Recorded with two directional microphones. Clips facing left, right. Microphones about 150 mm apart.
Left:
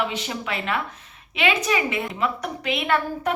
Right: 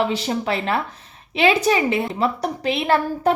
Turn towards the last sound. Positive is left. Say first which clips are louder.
# right 5 dB
turn(degrees=-35)  # may be behind; listen again after turning